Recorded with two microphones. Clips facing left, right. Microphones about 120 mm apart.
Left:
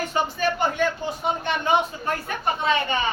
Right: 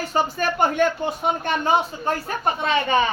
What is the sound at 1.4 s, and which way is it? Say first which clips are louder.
Speech: right 1 dB; 45° right (ahead or behind).